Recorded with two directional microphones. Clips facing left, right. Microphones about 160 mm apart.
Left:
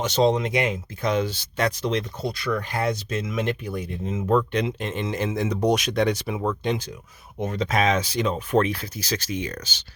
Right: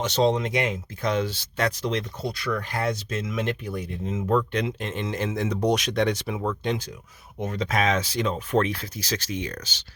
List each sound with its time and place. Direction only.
0.0 s speech: 10° left (ahead or behind)